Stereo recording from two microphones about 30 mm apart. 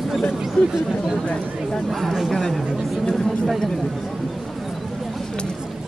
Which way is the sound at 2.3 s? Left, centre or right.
Centre.